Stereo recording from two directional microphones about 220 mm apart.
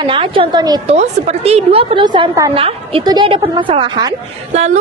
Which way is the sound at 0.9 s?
30° right (ahead or behind).